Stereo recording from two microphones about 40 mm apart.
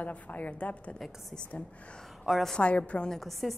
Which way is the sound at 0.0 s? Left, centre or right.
Left.